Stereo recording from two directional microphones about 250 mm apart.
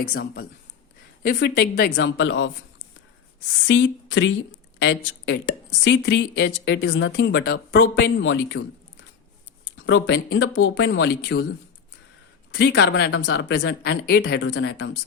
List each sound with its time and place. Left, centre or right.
0.0 s speech: left
3.7 s speech: left
9.7 s speech: left
12.5 s speech: left